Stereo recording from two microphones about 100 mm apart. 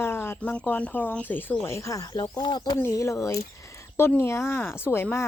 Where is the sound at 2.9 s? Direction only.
30° left (ahead or behind).